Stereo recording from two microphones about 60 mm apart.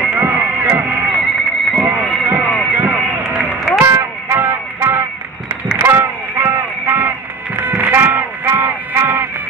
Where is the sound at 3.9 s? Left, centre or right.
Right.